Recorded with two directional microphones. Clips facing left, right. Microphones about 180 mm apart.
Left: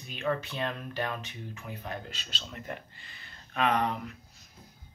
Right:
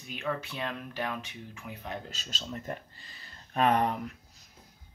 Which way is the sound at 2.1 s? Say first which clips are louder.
Right 4 dB; 40° right (ahead or behind).